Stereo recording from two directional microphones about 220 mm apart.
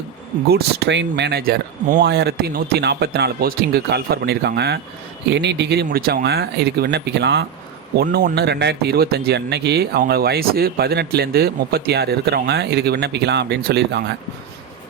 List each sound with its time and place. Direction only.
0.5 s speech: 50° right (ahead or behind)